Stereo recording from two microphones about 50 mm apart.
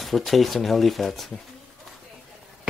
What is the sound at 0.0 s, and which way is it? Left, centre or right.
Speech, centre.